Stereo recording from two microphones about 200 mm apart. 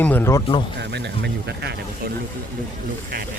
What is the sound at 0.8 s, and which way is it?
Speech, 55° right (ahead or behind).